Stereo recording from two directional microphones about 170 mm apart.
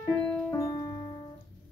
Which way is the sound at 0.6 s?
20° left (ahead or behind).